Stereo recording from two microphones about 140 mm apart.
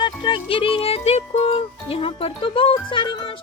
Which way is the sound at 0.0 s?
35° left (ahead or behind).